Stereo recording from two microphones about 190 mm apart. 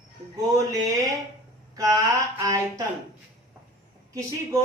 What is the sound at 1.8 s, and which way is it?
Speech, 20° right (ahead or behind).